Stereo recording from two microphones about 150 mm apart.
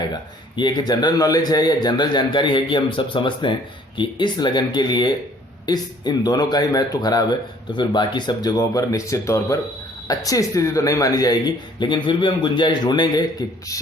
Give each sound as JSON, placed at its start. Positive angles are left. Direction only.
{"t": 0.1, "sound": "a man's voice", "side_deg": 30}